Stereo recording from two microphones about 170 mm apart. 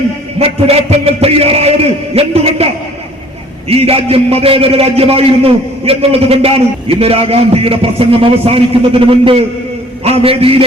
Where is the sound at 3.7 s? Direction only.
35° right (ahead or behind).